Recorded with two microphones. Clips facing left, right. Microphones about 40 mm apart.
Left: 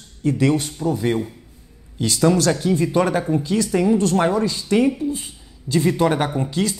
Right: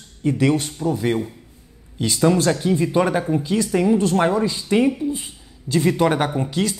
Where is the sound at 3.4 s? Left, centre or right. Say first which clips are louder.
Even; right.